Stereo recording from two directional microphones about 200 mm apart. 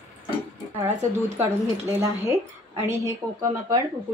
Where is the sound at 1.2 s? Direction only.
15° right (ahead or behind).